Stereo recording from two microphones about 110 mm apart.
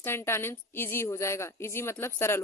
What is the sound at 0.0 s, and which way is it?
A woman's voice, 20° left (ahead or behind).